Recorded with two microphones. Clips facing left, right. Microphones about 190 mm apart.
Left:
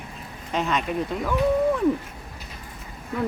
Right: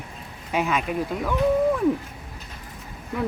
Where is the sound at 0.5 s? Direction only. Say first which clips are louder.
Right 1 dB; 5° right (ahead or behind).